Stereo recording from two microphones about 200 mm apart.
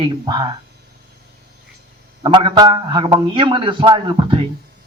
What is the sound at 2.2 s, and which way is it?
A man's voice, 25° right (ahead or behind).